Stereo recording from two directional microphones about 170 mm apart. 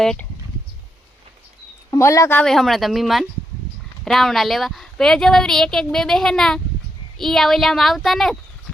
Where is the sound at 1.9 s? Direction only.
20° left (ahead or behind).